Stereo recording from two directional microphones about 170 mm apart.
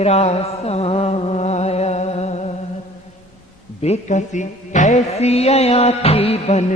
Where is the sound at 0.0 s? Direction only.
40° left (ahead or behind).